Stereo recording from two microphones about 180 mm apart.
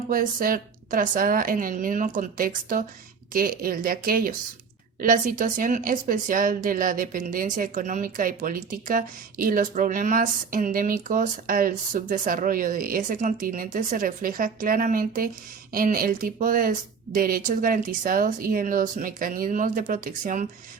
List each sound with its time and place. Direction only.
0.1 s speech: 50° right (ahead or behind)